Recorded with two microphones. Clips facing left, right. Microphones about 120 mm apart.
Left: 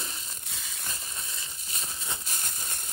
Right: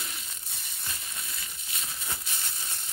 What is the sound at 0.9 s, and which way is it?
Rain on surface, 30° left (ahead or behind).